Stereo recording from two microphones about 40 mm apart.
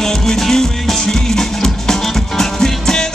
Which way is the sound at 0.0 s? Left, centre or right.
Centre.